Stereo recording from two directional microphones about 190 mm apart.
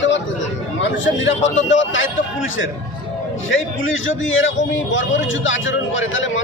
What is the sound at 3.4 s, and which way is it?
A man's voice, 90° left.